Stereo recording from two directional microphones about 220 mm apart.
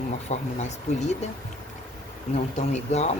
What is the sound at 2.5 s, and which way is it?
Speech, 30° left (ahead or behind).